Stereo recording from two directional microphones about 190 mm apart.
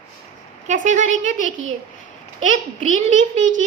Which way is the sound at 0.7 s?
40° right (ahead or behind).